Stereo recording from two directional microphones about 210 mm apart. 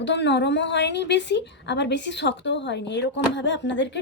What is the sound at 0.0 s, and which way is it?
A woman's voice, 55° left (ahead or behind).